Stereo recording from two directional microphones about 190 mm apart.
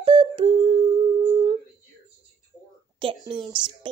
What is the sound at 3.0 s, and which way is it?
Speech, 25° right (ahead or behind).